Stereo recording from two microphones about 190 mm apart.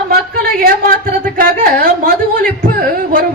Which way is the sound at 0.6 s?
50° right (ahead or behind).